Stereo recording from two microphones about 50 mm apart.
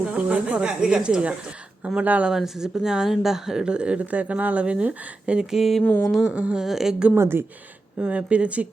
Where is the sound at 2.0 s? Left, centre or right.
Right.